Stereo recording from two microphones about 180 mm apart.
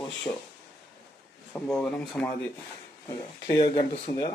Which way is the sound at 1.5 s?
5° left (ahead or behind).